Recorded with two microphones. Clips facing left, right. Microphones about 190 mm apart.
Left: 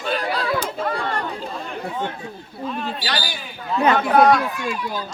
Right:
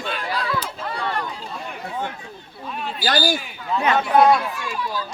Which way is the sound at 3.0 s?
45° right (ahead or behind).